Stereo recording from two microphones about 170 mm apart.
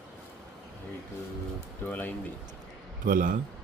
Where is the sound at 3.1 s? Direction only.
55° right (ahead or behind).